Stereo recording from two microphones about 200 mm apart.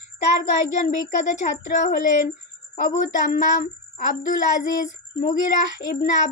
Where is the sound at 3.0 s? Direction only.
40° left (ahead or behind).